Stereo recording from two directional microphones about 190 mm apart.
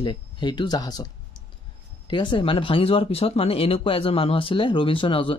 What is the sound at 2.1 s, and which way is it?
Speech, 25° left (ahead or behind).